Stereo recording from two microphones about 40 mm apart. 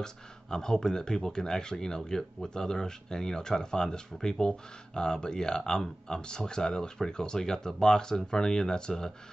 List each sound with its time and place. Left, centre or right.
0.0 s speech: centre